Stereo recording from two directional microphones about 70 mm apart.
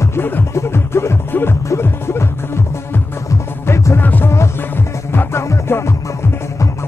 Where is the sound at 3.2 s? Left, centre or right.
Left.